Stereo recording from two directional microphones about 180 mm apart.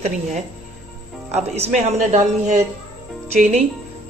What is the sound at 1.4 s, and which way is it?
A man's voice, 35° right (ahead or behind).